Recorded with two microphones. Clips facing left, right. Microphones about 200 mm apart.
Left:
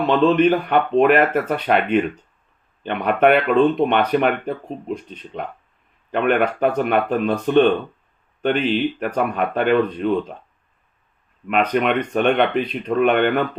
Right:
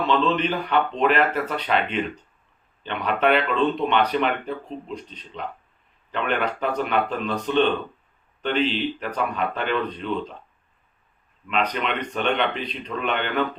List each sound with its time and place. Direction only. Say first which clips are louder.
0.0 s speech: left 7 dB; 50° left (ahead or behind)
11.4 s speech: left 7 dB; 55° left (ahead or behind)